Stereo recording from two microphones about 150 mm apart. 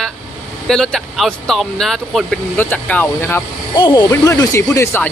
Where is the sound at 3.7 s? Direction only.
30° left (ahead or behind); by 5.1 s 15° left (ahead or behind).